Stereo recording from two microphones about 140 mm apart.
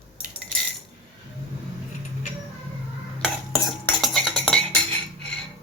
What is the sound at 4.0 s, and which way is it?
Cutlery, 5° left (ahead or behind).